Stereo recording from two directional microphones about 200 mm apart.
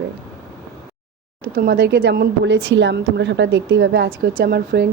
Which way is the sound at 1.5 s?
50° right (ahead or behind).